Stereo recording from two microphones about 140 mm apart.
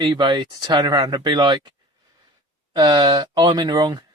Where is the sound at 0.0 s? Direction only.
35° right (ahead or behind).